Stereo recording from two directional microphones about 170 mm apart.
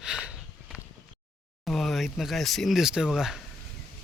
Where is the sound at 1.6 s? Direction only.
Centre (ahead or behind).